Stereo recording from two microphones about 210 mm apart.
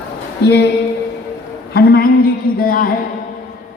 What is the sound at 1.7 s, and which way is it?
A woman's voice, 45° left (ahead or behind).